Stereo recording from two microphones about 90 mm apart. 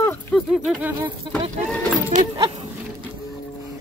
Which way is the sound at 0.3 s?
15° left (ahead or behind).